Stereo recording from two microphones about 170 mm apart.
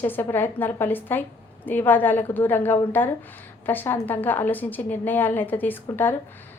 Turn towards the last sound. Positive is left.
turn(degrees=10)  # may be behind; listen again after turning